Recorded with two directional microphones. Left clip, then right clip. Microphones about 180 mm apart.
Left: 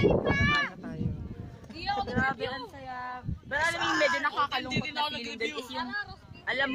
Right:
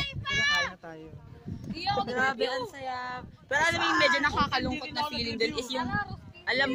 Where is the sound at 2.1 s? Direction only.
10° right (ahead or behind).